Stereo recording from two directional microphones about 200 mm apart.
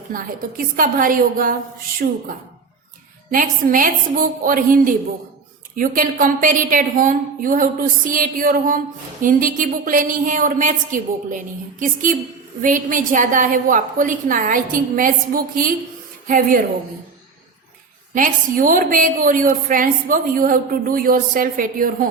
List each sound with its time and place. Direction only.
0.1 s a woman's voice: 45° right (ahead or behind)
3.3 s a woman's voice: 45° right (ahead or behind)
18.1 s a woman's voice: 40° right (ahead or behind)